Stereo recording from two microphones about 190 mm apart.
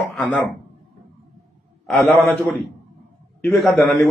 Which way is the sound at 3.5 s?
Centre (ahead or behind).